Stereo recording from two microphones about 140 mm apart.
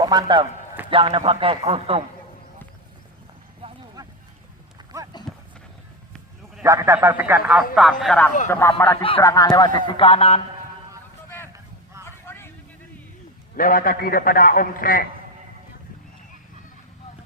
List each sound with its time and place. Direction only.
0.0 s a man's voice: 30° right (ahead or behind); by 2.0 s 45° right (ahead or behind)
4.0 s a sound: 30° right (ahead or behind)
5.3 s a sound: centre (ahead or behind)
6.7 s a man's voice: 20° right (ahead or behind)
7.8 s speech: centre (ahead or behind)
8.4 s speech: 20° left (ahead or behind)
9.0 s a man's voice: 40° left (ahead or behind)
9.2 s a man's voice: 25° left (ahead or behind); by 10.4 s 45° left (ahead or behind)
12.0 s vehicle: 20° left (ahead or behind)
13.6 s a man's voice: 90° left